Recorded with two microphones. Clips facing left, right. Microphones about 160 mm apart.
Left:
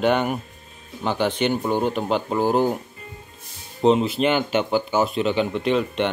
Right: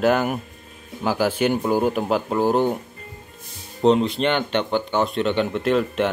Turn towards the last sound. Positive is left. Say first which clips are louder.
# right 1 dB
turn(degrees=0)  # may be behind; listen again after turning